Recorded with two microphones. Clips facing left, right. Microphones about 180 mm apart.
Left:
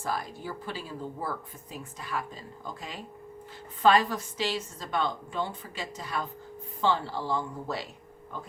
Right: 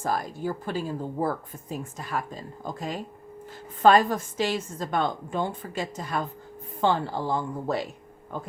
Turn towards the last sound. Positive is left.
turn(degrees=-50)  # may be behind; listen again after turning